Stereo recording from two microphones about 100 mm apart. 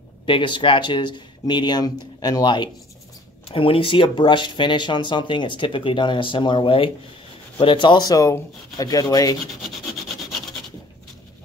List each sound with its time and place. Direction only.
0.3 s speech: 55° left (ahead or behind)
3.4 s speech: 65° left (ahead or behind); by 9.4 s 40° left (ahead or behind)